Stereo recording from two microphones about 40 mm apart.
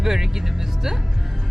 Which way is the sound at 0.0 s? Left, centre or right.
Centre.